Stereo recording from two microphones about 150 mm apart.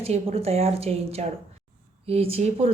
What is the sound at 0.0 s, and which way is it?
A woman's voice, 40° right (ahead or behind).